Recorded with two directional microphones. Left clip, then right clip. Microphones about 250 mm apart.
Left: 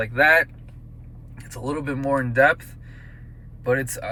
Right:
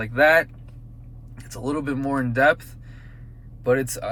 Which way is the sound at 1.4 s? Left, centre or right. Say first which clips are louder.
Right 1 dB; centre.